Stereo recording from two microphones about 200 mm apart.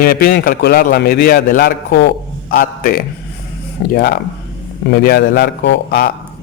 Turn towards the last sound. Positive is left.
turn(degrees=55)  # may be behind; listen again after turning